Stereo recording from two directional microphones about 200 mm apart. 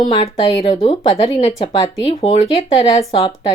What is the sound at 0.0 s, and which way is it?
Speech, 25° left (ahead or behind).